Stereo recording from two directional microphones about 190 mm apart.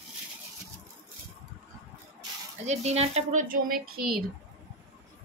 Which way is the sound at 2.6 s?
35° right (ahead or behind).